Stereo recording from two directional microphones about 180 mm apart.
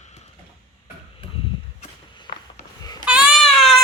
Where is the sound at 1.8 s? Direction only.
30° left (ahead or behind).